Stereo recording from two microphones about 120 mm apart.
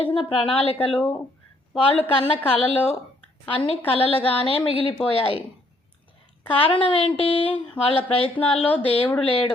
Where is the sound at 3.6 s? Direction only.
50° left (ahead or behind).